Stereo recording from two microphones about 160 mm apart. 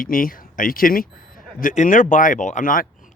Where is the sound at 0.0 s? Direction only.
60° left (ahead or behind).